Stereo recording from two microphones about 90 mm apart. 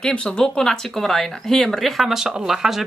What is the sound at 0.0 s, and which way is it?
Speech, 10° left (ahead or behind).